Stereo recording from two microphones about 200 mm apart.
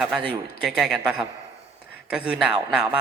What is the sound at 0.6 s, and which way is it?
Speech, 5° right (ahead or behind).